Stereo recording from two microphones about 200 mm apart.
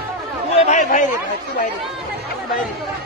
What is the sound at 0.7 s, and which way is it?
Chatter, 40° left (ahead or behind).